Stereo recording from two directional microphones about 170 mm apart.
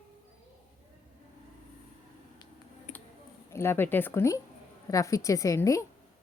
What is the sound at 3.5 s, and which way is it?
A woman's voice, 15° left (ahead or behind).